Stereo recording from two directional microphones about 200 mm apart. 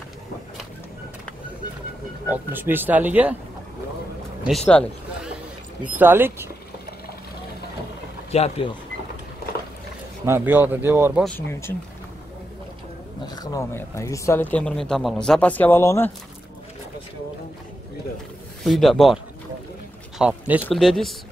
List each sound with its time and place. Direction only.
2.2 s speech: 10° right (ahead or behind)
4.5 s a man's voice: 5° left (ahead or behind)
5.9 s speech: 10° right (ahead or behind)
8.3 s speech: 30° left (ahead or behind)
10.2 s speech: 10° right (ahead or behind)
11.2 s speech: 10° left (ahead or behind)
13.3 s speech: 20° left (ahead or behind)
18.6 s a man's voice: centre (ahead or behind)
20.2 s a man's voice: 5° right (ahead or behind)